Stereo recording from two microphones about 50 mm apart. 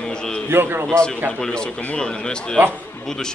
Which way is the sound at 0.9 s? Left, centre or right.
Centre.